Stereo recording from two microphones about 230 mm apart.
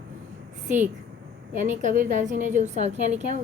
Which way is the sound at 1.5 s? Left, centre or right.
Right.